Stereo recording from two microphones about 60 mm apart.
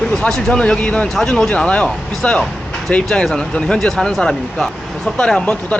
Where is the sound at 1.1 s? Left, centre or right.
Centre.